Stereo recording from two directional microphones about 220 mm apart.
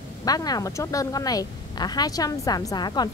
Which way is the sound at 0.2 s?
15° left (ahead or behind).